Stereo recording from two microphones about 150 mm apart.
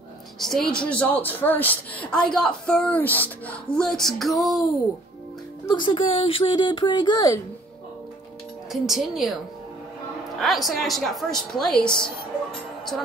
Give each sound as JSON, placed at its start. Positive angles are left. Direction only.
{"t": 0.4, "sound": "speech", "side_deg": 5}
{"t": 5.8, "sound": "speech", "side_deg": 35}
{"t": 8.7, "sound": "a woman's voice", "side_deg": 0}
{"t": 10.4, "sound": "a woman's voice", "side_deg": 0}